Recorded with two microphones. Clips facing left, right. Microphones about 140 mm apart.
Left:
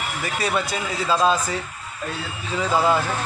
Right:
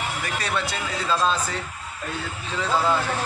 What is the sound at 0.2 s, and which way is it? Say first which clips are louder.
Speech: left 6 dB; 10° left (ahead or behind).